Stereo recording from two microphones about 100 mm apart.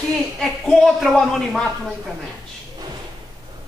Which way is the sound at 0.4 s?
5° left (ahead or behind).